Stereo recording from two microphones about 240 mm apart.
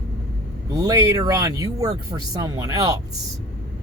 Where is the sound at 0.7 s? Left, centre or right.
Centre.